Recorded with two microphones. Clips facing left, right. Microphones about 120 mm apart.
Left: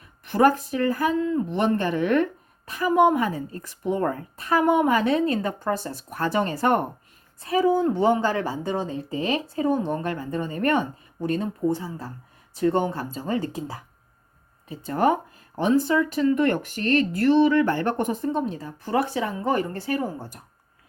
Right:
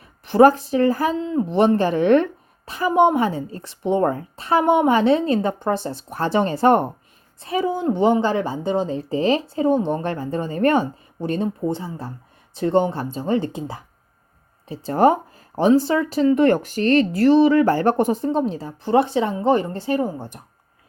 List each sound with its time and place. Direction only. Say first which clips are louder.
0.3 s speech: right 6 dB; 30° right (ahead or behind)